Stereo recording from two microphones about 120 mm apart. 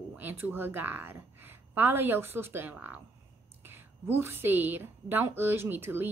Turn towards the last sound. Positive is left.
turn(degrees=-20)  # may be behind; listen again after turning